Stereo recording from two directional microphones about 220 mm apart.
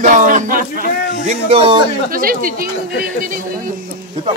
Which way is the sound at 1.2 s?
30° right (ahead or behind).